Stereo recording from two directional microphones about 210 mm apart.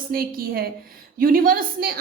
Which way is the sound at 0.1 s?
45° right (ahead or behind).